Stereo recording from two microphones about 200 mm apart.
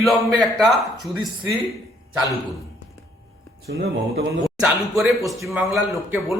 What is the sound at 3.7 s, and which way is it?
Speech, 60° right (ahead or behind).